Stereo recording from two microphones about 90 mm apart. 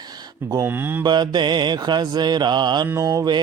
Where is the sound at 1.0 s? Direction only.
50° right (ahead or behind).